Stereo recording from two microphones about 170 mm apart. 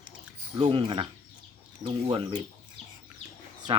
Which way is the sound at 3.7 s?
30° right (ahead or behind).